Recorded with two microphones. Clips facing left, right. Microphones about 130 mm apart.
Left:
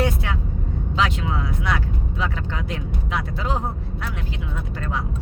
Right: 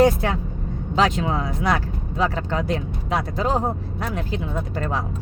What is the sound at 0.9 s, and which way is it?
Speech, 40° right (ahead or behind).